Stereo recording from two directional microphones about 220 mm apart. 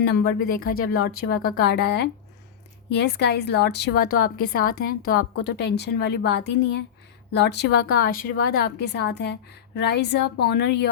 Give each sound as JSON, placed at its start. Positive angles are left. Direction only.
{"t": 0.0, "sound": "a woman's voice", "side_deg": 45}